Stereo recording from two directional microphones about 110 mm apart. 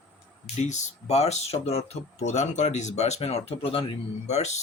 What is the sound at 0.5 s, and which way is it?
Speech, 90° left.